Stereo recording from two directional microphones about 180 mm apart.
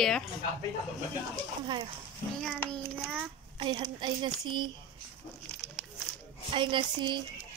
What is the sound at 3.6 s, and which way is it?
Speech, 25° right (ahead or behind).